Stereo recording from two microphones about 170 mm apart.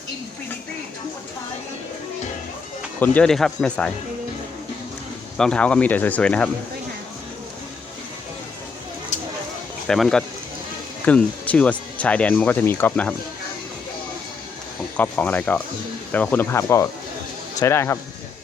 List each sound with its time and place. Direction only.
3.0 s speech: 10° left (ahead or behind)
5.4 s speech: 5° left (ahead or behind)
9.8 s speech: centre (ahead or behind)
14.9 s speech: 10° left (ahead or behind)